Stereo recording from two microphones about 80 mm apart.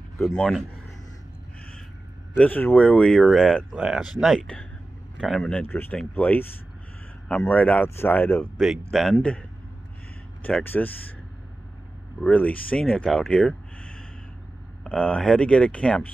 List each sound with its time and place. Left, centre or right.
0.4 s speech: centre
2.3 s speech: centre
3.7 s speech: centre
4.4 s speech: centre
5.2 s speech: centre
5.7 s speech: left
8.5 s speech: centre
10.6 s speech: left
12.3 s speech: centre